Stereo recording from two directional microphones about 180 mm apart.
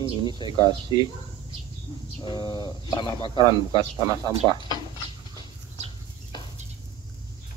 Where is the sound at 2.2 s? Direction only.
25° left (ahead or behind).